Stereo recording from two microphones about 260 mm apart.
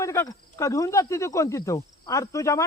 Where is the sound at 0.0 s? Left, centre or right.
Centre.